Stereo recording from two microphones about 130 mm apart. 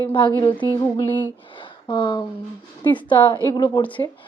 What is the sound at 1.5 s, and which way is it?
A woman's voice, 40° left (ahead or behind).